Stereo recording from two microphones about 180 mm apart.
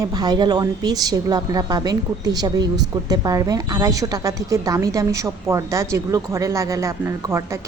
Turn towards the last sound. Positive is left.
turn(degrees=-15)  # may be behind; listen again after turning